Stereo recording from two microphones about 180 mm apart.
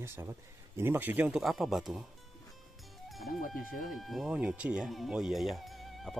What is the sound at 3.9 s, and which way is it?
Speech, centre (ahead or behind).